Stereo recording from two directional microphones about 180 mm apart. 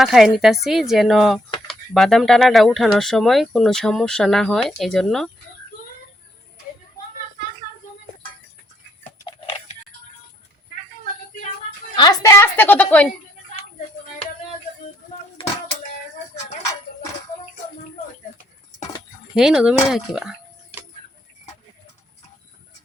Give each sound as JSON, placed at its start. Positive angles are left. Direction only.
{"t": 0.0, "sound": "speech", "side_deg": 0}
{"t": 9.2, "sound": "tick-tock", "side_deg": 30}
{"t": 11.9, "sound": "a woman's voice", "side_deg": 20}
{"t": 19.4, "sound": "speech", "side_deg": -5}